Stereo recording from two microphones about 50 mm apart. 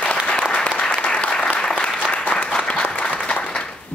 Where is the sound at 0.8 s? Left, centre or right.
Centre.